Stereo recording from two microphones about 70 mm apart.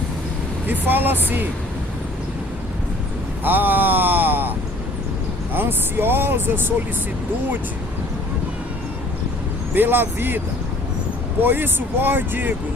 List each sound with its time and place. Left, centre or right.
0.7 s speech: right
3.4 s a sound: right
5.5 s speech: right
9.7 s speech: right